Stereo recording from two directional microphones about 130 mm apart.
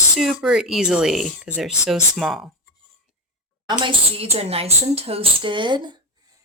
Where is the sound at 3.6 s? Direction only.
45° right (ahead or behind).